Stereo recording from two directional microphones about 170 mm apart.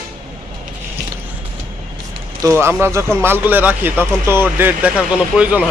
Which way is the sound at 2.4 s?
15° right (ahead or behind).